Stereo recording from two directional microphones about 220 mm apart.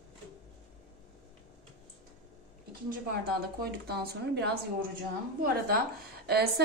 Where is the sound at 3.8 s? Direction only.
45° right (ahead or behind).